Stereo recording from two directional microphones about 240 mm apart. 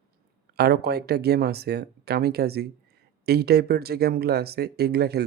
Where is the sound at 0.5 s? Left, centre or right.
Right.